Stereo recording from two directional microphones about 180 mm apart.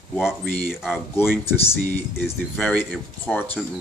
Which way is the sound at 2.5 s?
10° left (ahead or behind).